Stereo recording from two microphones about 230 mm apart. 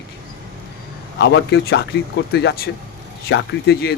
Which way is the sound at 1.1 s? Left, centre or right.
Left.